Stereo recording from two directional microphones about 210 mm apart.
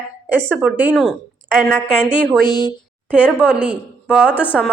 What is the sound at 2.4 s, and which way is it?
Speech, 20° left (ahead or behind).